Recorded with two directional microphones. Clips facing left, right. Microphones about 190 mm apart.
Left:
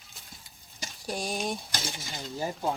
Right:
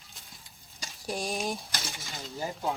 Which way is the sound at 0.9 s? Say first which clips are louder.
Even; centre (ahead or behind).